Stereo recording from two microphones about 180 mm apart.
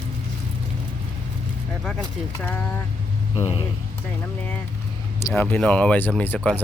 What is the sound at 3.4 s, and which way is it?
Speech, 30° left (ahead or behind).